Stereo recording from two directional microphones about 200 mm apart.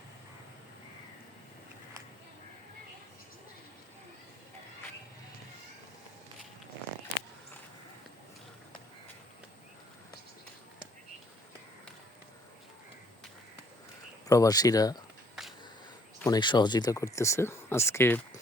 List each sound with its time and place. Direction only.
14.3 s speech: 15° left (ahead or behind)
15.4 s sniff: 5° right (ahead or behind)
16.2 s speech: 20° left (ahead or behind)